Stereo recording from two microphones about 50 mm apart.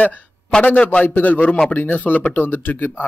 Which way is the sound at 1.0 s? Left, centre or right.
Left.